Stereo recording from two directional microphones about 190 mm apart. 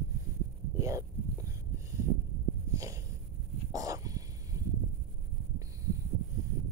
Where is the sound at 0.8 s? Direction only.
15° right (ahead or behind).